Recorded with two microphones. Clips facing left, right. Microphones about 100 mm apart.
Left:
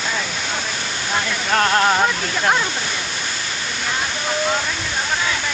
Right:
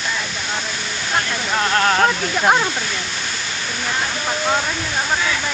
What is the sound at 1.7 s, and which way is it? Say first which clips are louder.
Speech: right 2 dB; 10° left (ahead or behind).